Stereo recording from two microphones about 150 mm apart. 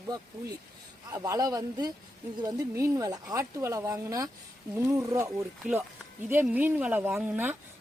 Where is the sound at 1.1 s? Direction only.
25° right (ahead or behind).